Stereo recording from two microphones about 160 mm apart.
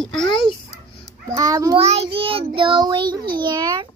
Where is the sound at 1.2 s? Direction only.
25° right (ahead or behind).